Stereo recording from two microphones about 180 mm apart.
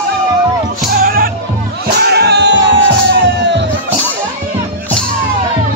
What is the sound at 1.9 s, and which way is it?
Music, 65° right (ahead or behind).